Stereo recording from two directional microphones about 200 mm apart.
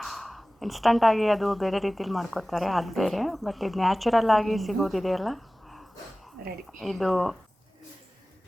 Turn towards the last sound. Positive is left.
turn(degrees=0)  # may be behind; listen again after turning